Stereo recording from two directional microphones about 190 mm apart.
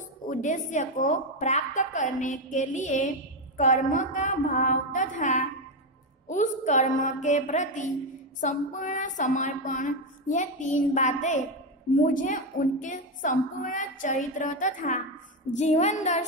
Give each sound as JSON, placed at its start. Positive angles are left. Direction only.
{"t": 0.3, "sound": "a woman's voice", "side_deg": 40}